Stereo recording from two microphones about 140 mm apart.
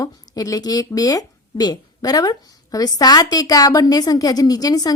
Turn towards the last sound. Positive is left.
turn(degrees=25)  # may be behind; listen again after turning